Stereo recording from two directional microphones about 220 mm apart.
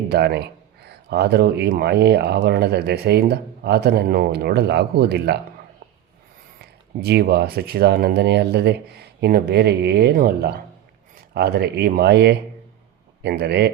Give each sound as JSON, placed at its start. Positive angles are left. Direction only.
{"t": 0.1, "sound": "speech", "side_deg": -50}
{"t": 6.6, "sound": "speech", "side_deg": -50}